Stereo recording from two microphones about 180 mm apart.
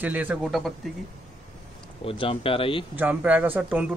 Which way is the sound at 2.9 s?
10° right (ahead or behind).